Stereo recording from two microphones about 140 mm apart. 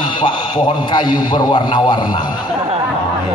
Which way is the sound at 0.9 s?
35° left (ahead or behind).